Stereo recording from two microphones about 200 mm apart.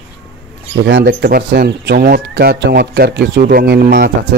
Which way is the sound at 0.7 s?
65° right (ahead or behind).